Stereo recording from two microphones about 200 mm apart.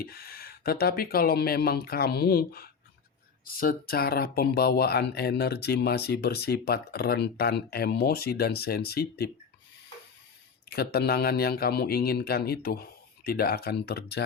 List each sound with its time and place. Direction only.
0.0 s speech: 50° left (ahead or behind)
10.7 s speech: 50° left (ahead or behind)